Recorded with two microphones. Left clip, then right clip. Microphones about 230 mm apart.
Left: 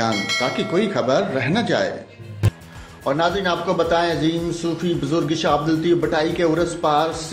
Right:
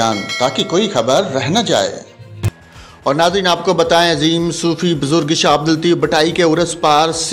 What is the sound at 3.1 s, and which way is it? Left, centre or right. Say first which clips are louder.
A man's voice: right 7 dB; right.